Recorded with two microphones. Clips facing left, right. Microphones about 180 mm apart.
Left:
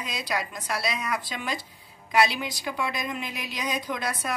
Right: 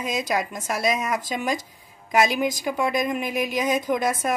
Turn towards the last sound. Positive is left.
turn(degrees=-50)  # may be behind; listen again after turning